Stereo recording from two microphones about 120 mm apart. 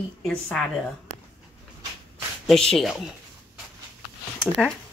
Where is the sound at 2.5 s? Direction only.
Centre (ahead or behind).